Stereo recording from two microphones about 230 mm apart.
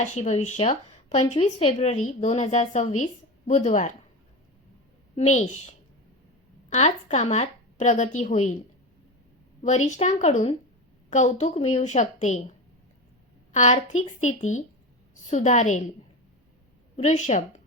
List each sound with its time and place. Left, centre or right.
0.0 s a woman's voice: left
5.1 s speech: left
6.7 s speech: left
9.6 s speech: left
13.5 s a woman's voice: left
17.0 s speech: left